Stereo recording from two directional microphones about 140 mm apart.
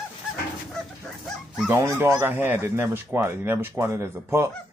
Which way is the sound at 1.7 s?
20° right (ahead or behind).